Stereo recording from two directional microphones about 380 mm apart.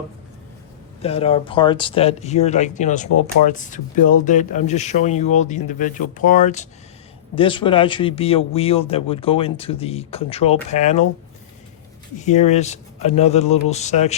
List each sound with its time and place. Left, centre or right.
1.0 s a man's voice: centre
12.2 s a man's voice: centre